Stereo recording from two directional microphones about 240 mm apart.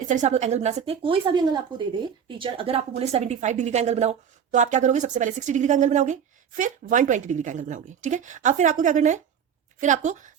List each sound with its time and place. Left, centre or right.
0.1 s a woman's voice: right